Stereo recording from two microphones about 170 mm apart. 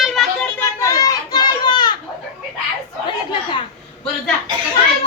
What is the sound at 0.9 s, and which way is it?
Children playing, 20° left (ahead or behind).